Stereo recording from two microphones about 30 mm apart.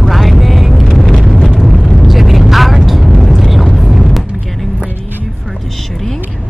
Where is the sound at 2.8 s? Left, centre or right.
Centre.